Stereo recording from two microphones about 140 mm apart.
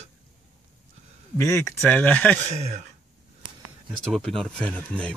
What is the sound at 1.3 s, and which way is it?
Speech, 20° left (ahead or behind).